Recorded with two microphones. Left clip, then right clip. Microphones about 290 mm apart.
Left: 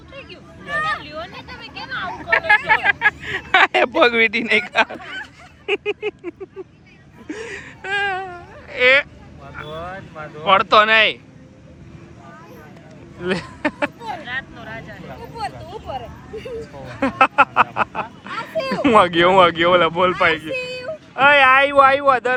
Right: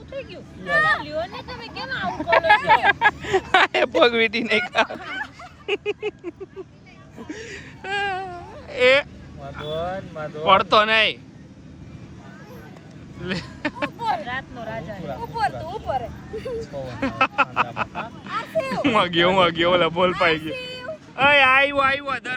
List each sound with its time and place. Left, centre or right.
0.1 s vehicle: right
1.0 s speech: right
2.5 s vehicle: centre
3.5 s speech: centre
7.3 s baby cry: centre
9.6 s speech: right
10.4 s speech: centre
13.2 s speech: centre
14.3 s vehicle: right
15.4 s speech: centre
20.5 s a sound: left
21.2 s speech: centre